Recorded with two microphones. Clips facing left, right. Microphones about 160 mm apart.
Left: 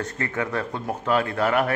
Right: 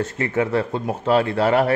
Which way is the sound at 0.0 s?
25° right (ahead or behind).